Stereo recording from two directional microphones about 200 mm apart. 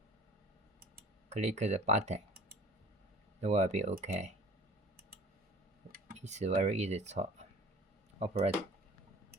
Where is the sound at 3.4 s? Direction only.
35° right (ahead or behind).